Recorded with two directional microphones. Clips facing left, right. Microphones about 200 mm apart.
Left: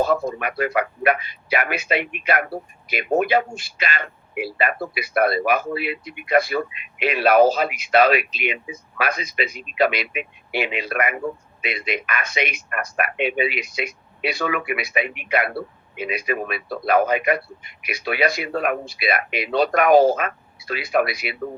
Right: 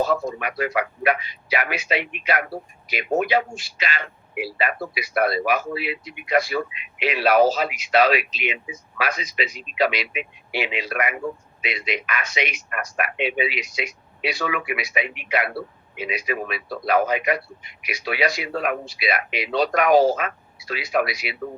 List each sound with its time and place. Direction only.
0.0 s a man's voice: 55° left (ahead or behind)